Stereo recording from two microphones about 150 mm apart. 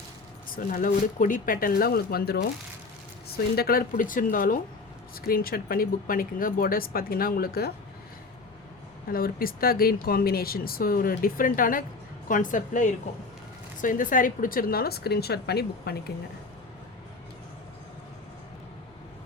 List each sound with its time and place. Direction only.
0.4 s a woman's voice: 70° left (ahead or behind)
5.2 s speech: 80° left
9.0 s a woman's voice: 75° left (ahead or behind)